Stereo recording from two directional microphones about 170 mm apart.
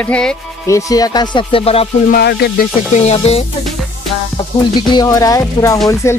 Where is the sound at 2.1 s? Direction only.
70° left (ahead or behind).